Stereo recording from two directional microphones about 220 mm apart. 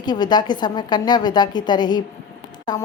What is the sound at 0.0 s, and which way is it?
A woman's voice, 20° left (ahead or behind).